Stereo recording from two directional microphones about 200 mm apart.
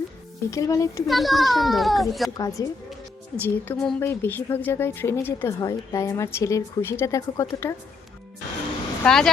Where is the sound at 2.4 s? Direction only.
15° left (ahead or behind).